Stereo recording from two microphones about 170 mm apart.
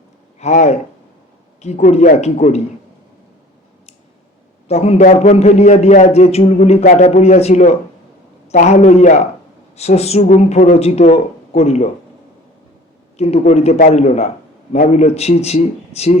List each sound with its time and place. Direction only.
0.3 s a man's voice: 40° left (ahead or behind)
4.7 s a man's voice: 40° left (ahead or behind)
13.1 s a man's voice: 40° left (ahead or behind)